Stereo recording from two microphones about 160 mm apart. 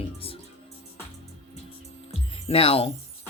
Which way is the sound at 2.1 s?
35° left (ahead or behind).